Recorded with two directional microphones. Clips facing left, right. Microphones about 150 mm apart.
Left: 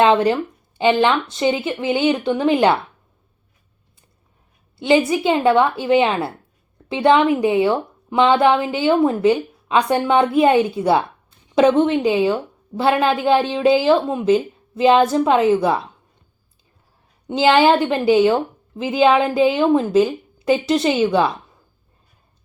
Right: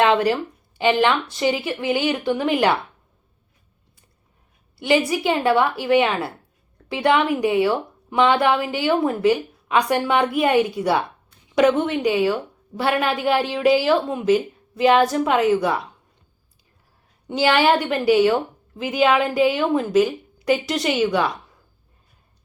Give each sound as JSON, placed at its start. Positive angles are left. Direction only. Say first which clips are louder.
{"t": 0.0, "sound": "speech", "louder": "left 3 dB", "side_deg": 25}
{"t": 4.8, "sound": "speech", "louder": "left 3 dB", "side_deg": 25}
{"t": 17.2, "sound": "speech", "louder": "left 4 dB", "side_deg": 25}